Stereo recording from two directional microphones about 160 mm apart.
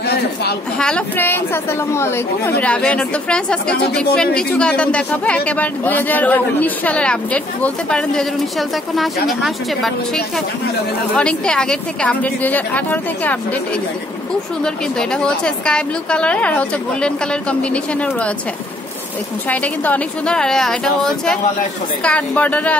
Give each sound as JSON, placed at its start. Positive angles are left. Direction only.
{"t": 0.0, "sound": "a woman's voice", "side_deg": 85}
{"t": 0.7, "sound": "a woman's voice", "side_deg": 5}
{"t": 14.6, "sound": "a woman's voice", "side_deg": 5}
{"t": 19.5, "sound": "a woman's voice", "side_deg": 10}